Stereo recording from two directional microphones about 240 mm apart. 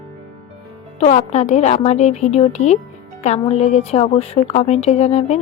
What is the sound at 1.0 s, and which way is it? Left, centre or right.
Speech, left.